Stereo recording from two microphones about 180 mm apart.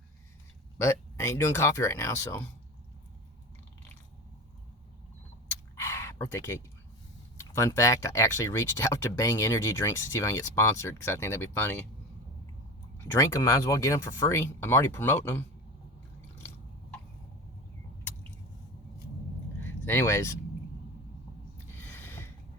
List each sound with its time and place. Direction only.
0.8 s speech: 15° left (ahead or behind)
5.7 s a sound: 15° left (ahead or behind)
7.3 s speech: 15° left (ahead or behind)
13.1 s speech: 15° left (ahead or behind)
19.8 s speech: 10° left (ahead or behind)
21.8 s a sound: 10° left (ahead or behind)